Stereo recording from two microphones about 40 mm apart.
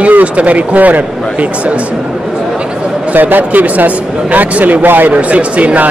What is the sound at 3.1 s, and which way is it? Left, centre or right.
A man's voice, right.